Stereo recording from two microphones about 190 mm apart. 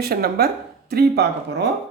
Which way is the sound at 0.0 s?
55° right (ahead or behind).